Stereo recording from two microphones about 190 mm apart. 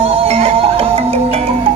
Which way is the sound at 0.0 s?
30° right (ahead or behind).